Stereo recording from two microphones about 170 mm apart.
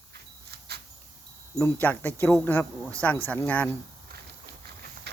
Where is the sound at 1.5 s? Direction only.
10° left (ahead or behind).